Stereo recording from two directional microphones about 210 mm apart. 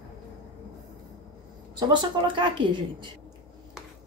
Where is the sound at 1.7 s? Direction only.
20° right (ahead or behind).